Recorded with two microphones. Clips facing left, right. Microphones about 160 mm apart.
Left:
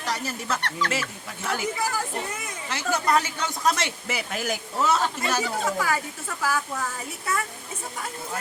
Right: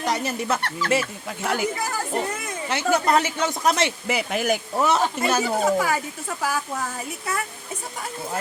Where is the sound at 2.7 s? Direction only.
25° right (ahead or behind).